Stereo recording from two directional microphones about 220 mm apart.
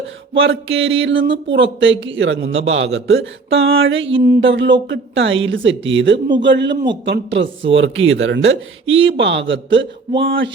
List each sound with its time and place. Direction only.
0.3 s a man's voice: 65° right (ahead or behind)
4.2 s a man's voice: 50° right (ahead or behind)